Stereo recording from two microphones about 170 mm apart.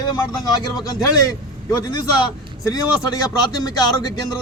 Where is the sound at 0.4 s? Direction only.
25° left (ahead or behind).